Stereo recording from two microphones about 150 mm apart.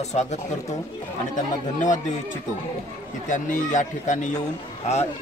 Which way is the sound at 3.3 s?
55° left (ahead or behind).